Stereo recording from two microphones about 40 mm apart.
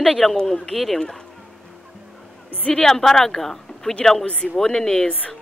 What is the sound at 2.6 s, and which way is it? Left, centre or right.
A woman's voice, centre.